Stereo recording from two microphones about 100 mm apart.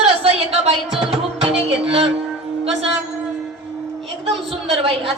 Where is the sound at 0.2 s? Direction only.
90° right.